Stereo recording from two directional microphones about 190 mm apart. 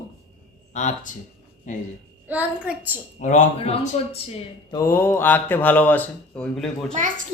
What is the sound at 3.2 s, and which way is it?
Speech, 40° left (ahead or behind).